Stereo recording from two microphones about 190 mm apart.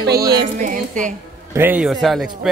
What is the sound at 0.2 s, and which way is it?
Music, 20° right (ahead or behind).